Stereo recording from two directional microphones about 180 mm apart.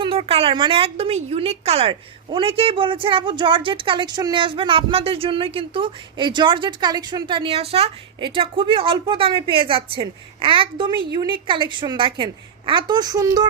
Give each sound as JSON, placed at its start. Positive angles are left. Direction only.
{"t": 0.0, "sound": "a woman's voice", "side_deg": -30}